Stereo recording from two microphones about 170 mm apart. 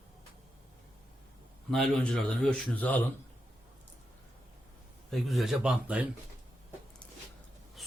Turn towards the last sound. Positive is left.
turn(degrees=0)  # may be behind; listen again after turning